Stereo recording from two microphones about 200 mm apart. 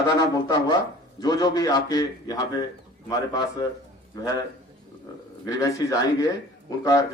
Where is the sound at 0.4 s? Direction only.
20° left (ahead or behind).